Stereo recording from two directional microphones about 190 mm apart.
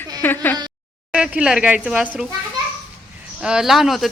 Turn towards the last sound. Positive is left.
turn(degrees=0)  # may be behind; listen again after turning